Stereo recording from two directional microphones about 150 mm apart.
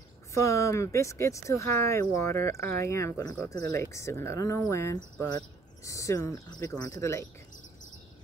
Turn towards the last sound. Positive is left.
turn(degrees=20)  # may be behind; listen again after turning